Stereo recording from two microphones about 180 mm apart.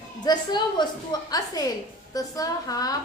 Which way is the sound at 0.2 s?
25° left (ahead or behind).